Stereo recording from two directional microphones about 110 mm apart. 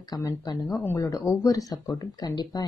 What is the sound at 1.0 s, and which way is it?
Speech, 35° left (ahead or behind).